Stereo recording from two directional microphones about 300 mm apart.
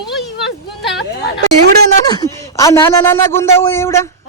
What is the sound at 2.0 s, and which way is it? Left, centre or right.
A man's voice, centre.